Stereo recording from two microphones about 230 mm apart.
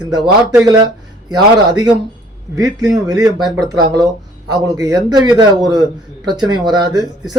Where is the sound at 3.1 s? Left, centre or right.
Centre.